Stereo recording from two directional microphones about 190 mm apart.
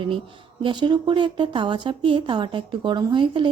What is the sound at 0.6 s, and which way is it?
A woman's voice, 25° right (ahead or behind).